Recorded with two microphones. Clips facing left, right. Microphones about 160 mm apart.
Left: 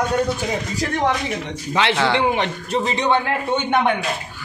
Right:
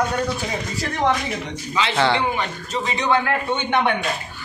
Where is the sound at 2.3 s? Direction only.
70° left (ahead or behind).